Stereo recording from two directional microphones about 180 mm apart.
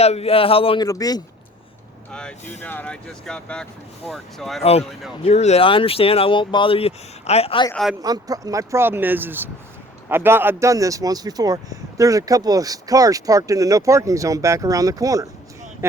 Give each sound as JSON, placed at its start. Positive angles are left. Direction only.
{"t": 0.0, "sound": "speech", "side_deg": 35}
{"t": 0.9, "sound": "speech", "side_deg": 20}
{"t": 2.0, "sound": "speech", "side_deg": 5}
{"t": 4.6, "sound": "speech", "side_deg": 35}
{"t": 7.7, "sound": "speech", "side_deg": 0}
{"t": 8.0, "sound": "speech", "side_deg": -20}